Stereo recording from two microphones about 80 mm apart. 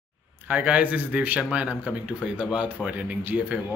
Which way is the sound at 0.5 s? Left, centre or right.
Centre.